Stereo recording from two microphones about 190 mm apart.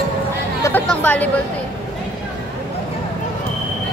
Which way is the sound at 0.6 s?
10° left (ahead or behind).